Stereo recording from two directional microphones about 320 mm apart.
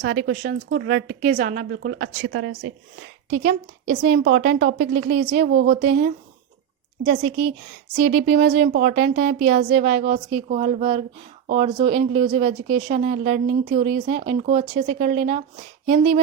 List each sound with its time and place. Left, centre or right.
0.0 s a woman's voice: right